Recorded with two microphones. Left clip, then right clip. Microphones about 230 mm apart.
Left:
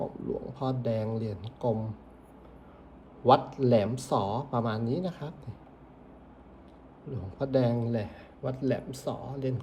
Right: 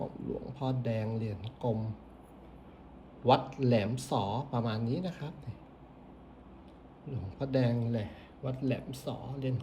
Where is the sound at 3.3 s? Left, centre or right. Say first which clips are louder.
Left 5 dB; centre.